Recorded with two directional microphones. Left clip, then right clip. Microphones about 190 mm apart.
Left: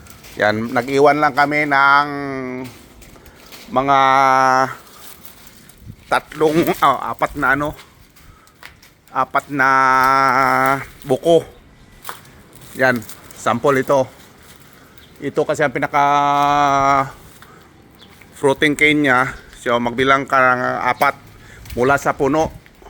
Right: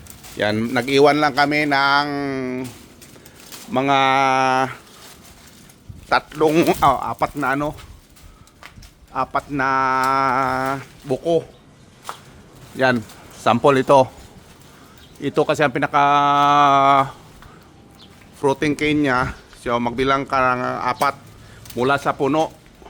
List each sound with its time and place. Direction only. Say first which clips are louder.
0.3 s a man's voice: left 4 dB; 25° right (ahead or behind); by 2.6 s 45° right (ahead or behind)
3.7 s a man's voice: left 3 dB; 40° right (ahead or behind)
4.4 s speech: left 4 dB; 10° right (ahead or behind)
6.1 s speech: left 1 dB; 10° right (ahead or behind)
6.5 s speech: right 2 dB; 20° right (ahead or behind)
6.7 s speech: left 1 dB; 5° right (ahead or behind)
9.1 s speech: left 4 dB; 5° left (ahead or behind)
10.5 s speech: left 7 dB; 15° left (ahead or behind)
12.7 s speech: left 2 dB; 5° right (ahead or behind)
13.4 s speech: right 1 dB; 15° right (ahead or behind)
15.2 s speech: even; 20° right (ahead or behind)
18.6 s speech: left 5 dB; 10° left (ahead or behind)